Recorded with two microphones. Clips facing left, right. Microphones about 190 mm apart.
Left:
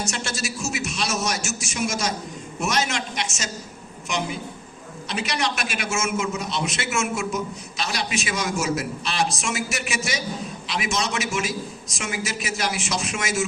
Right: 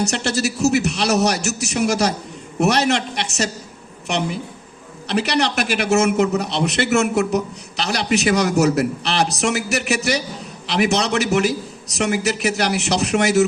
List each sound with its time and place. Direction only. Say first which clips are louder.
0.0 s a man's voice: right 9 dB; 65° right (ahead or behind)